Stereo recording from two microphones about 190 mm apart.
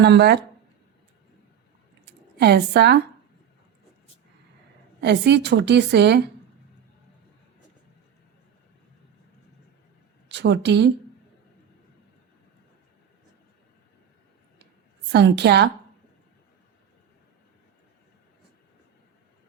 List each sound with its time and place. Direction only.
0.0 s a woman's voice: 60° right (ahead or behind)
2.4 s a woman's voice: 60° right (ahead or behind)
4.9 s a woman's voice: 65° right (ahead or behind)
10.2 s a woman's voice: 65° right (ahead or behind)
15.1 s a woman's voice: 60° right (ahead or behind)